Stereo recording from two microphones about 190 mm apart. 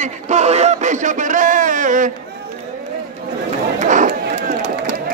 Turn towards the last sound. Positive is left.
turn(degrees=-60)  # may be behind; listen again after turning